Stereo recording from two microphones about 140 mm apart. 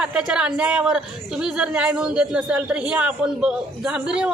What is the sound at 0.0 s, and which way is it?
A woman's voice, 5° right (ahead or behind).